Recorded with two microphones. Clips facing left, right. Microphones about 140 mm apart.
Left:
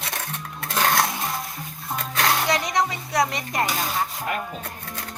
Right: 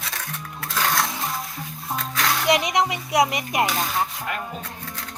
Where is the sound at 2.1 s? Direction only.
45° left (ahead or behind).